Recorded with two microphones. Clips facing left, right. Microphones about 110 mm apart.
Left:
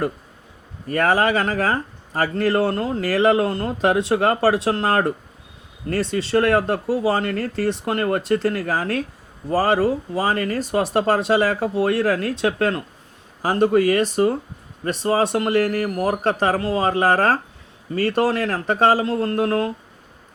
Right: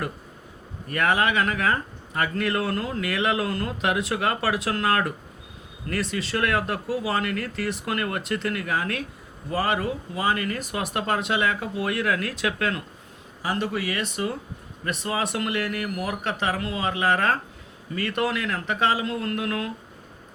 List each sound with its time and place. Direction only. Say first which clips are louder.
0.9 s speech: left 5 dB; 35° left (ahead or behind)